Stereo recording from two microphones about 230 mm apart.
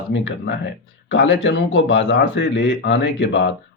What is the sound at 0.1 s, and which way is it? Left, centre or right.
Speech, left.